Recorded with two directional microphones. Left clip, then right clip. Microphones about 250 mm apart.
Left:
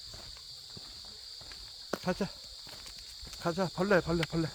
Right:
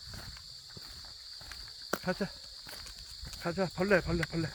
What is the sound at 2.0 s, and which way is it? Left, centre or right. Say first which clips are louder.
Speech: left 3 dB; left.